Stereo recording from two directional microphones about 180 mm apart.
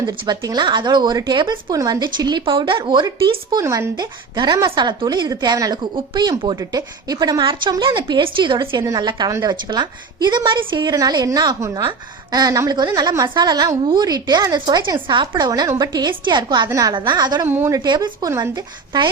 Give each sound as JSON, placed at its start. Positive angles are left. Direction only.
{"t": 0.3, "sound": "a woman's voice", "side_deg": -25}
{"t": 17.4, "sound": "a woman's voice", "side_deg": -10}
{"t": 17.7, "sound": "a woman's voice", "side_deg": -25}